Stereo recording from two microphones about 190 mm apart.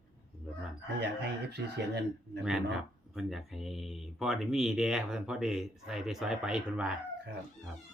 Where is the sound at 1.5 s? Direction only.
60° right (ahead or behind).